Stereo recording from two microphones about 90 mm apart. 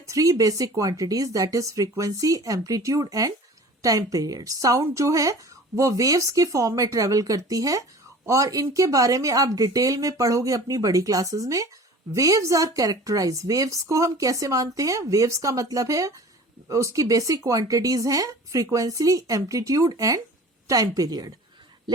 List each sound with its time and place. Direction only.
0.1 s a woman's voice: 40° right (ahead or behind)